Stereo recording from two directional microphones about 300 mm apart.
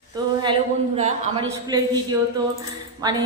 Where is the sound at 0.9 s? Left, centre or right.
Right.